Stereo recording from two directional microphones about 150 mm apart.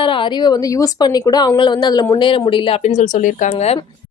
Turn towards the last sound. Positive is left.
turn(degrees=40)  # may be behind; listen again after turning